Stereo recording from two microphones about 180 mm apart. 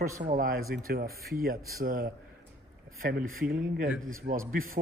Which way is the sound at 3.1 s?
55° right (ahead or behind).